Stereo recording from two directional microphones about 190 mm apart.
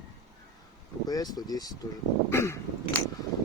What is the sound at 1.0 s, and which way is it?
Speech, 20° left (ahead or behind).